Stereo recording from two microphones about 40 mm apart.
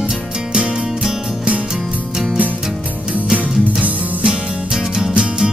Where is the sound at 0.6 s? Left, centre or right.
Right.